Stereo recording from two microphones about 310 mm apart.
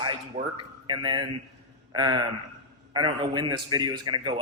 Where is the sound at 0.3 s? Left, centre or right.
Centre.